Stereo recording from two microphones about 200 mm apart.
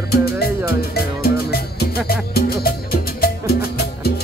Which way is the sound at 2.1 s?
50° left (ahead or behind).